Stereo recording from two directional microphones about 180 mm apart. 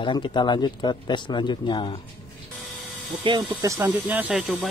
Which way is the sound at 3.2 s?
25° right (ahead or behind).